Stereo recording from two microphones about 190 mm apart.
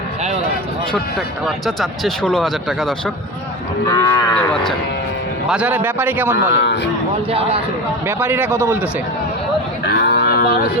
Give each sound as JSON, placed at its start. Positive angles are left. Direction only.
{"t": 1.5, "sound": "speech", "side_deg": 0}
{"t": 3.8, "sound": "livestock", "side_deg": 15}
{"t": 5.5, "sound": "a man's voice", "side_deg": -5}
{"t": 6.5, "sound": "speech", "side_deg": 65}
{"t": 7.3, "sound": "a man's voice", "side_deg": -30}
{"t": 8.0, "sound": "a man's voice", "side_deg": -10}
{"t": 9.8, "sound": "cattle", "side_deg": 60}